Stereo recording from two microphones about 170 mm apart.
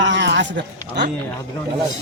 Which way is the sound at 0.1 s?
90° right.